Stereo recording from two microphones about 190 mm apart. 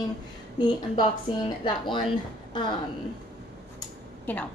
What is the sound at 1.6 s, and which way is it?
Speech, 25° left (ahead or behind).